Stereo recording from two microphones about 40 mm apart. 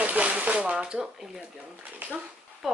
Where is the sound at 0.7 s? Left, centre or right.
Right.